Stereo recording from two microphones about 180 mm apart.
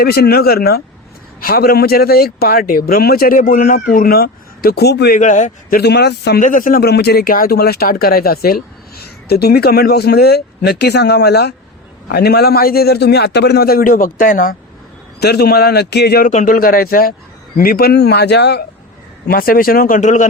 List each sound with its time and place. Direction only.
0.0 s speech: 60° left (ahead or behind)
5.2 s speech: 45° left (ahead or behind)
5.8 s speech: 65° left (ahead or behind)
6.4 s speech: 45° left (ahead or behind)
15.2 s speech: 60° left (ahead or behind)
16.3 s speech: 50° left (ahead or behind); by 18.6 s 70° left (ahead or behind)
19.3 s speech: 55° left (ahead or behind)